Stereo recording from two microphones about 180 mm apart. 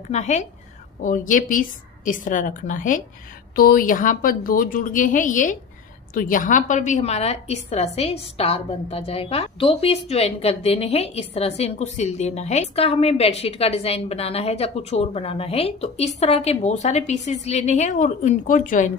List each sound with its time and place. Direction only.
0.1 s a woman's voice: 40° left (ahead or behind)